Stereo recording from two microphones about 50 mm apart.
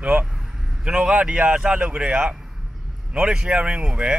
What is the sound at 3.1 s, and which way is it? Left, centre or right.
Speech, centre.